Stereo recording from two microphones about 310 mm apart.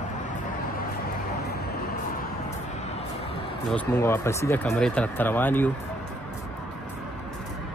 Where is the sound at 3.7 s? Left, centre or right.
Centre.